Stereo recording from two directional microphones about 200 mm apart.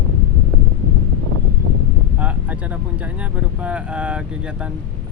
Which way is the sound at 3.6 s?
5° right (ahead or behind).